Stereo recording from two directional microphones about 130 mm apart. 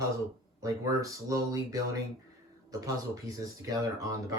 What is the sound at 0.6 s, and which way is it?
Speech, 25° right (ahead or behind).